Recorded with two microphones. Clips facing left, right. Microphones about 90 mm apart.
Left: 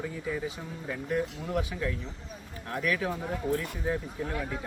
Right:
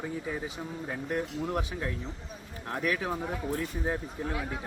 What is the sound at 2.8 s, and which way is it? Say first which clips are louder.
Speech: left 1 dB; 30° right (ahead or behind).